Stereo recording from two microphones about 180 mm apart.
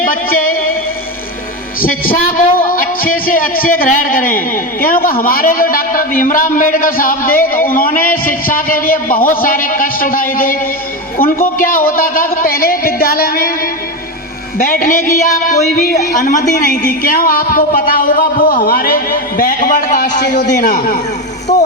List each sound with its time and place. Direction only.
0.0 s music: 50° left (ahead or behind)
1.8 s speech: 50° left (ahead or behind)
14.6 s speech: 50° left (ahead or behind)